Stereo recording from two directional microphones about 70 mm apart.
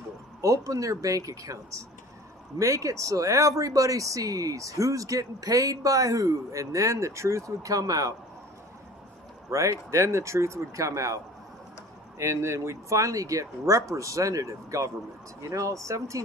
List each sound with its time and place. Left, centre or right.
0.4 s speech: right
9.5 s speech: right
12.2 s speech: right